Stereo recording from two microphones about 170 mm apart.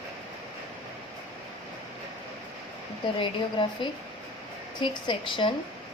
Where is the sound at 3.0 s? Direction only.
30° left (ahead or behind).